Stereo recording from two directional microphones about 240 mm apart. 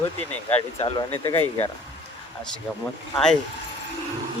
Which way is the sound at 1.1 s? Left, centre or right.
Centre.